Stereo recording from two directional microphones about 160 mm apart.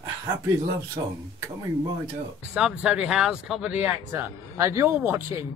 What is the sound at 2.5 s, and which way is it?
Speech, 5° right (ahead or behind).